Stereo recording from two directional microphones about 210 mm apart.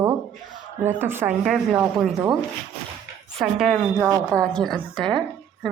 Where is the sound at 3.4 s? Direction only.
Centre (ahead or behind).